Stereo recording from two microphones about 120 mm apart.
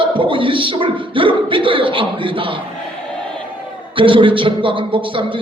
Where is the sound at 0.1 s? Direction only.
45° right (ahead or behind).